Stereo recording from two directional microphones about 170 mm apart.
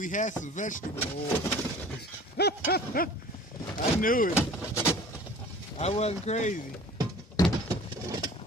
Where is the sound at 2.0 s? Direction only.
75° left (ahead or behind); by 4.3 s 55° left (ahead or behind).